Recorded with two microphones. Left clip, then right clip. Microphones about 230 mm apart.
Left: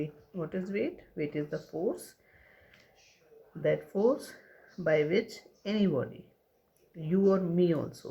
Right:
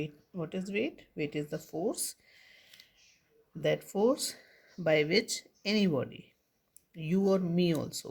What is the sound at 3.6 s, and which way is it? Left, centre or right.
Speech, right.